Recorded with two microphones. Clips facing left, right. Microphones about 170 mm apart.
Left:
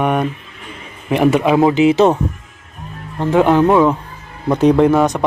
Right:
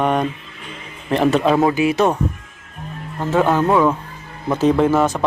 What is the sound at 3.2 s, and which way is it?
Speech, 15° left (ahead or behind).